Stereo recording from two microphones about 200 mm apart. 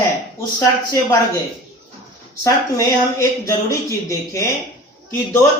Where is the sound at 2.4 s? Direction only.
15° left (ahead or behind).